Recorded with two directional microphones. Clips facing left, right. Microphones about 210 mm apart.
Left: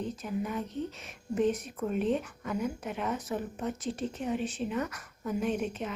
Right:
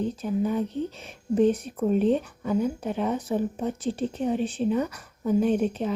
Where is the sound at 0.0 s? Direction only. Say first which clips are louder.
Right 8 dB; 30° right (ahead or behind).